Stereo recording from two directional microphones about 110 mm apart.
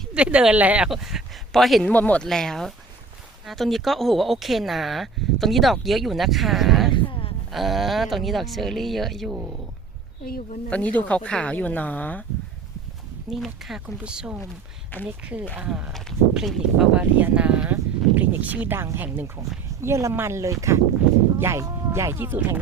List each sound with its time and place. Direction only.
0.1 s speech: 10° right (ahead or behind)
0.9 s speech: 5° right (ahead or behind)
1.8 s speech: 15° left (ahead or behind)
6.9 s a sound: 55° left (ahead or behind)
7.5 s speech: centre (ahead or behind)
10.7 s speech: 10° left (ahead or behind)
13.3 s speech: centre (ahead or behind); by 22.5 s 20° right (ahead or behind)